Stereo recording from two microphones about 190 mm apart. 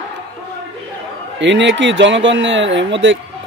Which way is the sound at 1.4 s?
70° right (ahead or behind).